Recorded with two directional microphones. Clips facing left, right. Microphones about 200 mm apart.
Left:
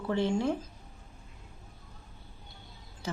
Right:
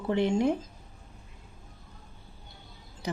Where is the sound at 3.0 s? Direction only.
15° right (ahead or behind).